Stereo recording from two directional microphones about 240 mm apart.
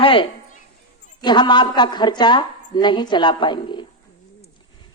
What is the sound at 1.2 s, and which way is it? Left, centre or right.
A woman's voice, centre.